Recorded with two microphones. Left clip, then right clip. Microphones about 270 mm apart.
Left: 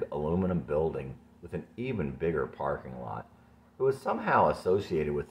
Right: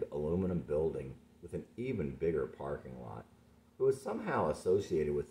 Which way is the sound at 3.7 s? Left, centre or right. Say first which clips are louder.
Left 4 dB; centre.